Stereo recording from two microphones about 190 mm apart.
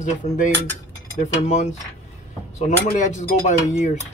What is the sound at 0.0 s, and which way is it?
Speech, 40° left (ahead or behind).